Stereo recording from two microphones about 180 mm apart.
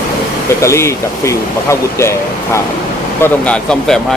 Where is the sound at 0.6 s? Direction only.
15° left (ahead or behind).